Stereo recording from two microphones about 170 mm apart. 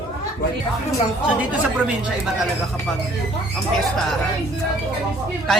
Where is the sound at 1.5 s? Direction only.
5° right (ahead or behind).